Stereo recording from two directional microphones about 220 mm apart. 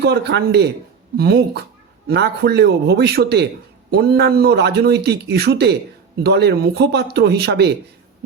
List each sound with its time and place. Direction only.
0.0 s speech: 50° right (ahead or behind)